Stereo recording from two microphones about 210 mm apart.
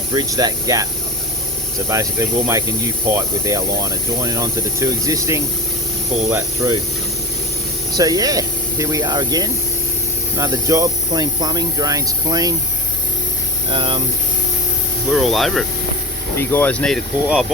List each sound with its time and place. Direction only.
0.1 s speech: 15° right (ahead or behind)
1.9 s speech: 15° right (ahead or behind)
7.9 s speech: 15° right (ahead or behind)
13.7 s speech: 25° right (ahead or behind)
15.1 s speech: centre (ahead or behind)